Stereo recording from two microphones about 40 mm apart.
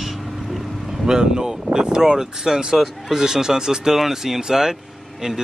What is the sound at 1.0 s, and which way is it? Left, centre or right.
Speech, centre.